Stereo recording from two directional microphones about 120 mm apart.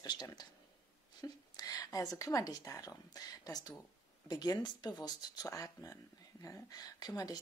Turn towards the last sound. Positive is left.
turn(degrees=35)  # may be behind; listen again after turning